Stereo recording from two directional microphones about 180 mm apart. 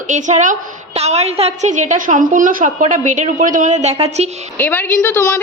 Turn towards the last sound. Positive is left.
turn(degrees=15)  # may be behind; listen again after turning